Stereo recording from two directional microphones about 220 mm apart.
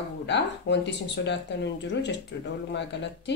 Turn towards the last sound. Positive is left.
turn(degrees=55)  # may be behind; listen again after turning